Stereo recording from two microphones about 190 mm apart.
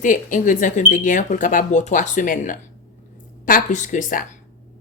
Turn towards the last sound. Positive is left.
turn(degrees=40)  # may be behind; listen again after turning